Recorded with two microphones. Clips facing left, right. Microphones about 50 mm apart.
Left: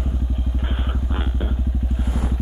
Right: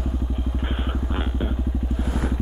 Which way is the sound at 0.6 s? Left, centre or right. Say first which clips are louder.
Right 1 dB; centre.